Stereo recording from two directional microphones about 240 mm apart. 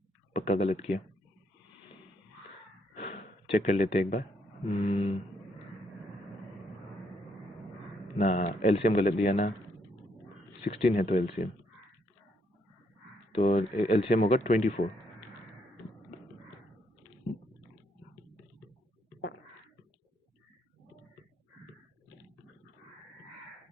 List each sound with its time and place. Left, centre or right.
0.3 s speech: left
2.9 s gasp: left
4.8 s speech: left
8.2 s speech: left
10.6 s speech: left
13.3 s speech: left